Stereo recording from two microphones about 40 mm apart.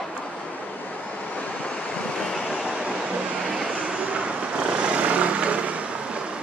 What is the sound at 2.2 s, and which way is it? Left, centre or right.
Vehicle, centre.